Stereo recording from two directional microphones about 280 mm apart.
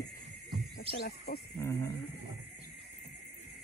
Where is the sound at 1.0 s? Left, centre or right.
Left.